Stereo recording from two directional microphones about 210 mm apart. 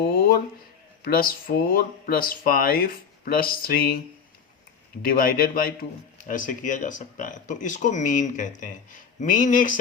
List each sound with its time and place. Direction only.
0.0 s a sound: 45° left (ahead or behind)
1.0 s speech: 45° left (ahead or behind)
5.0 s speech: 45° left (ahead or behind)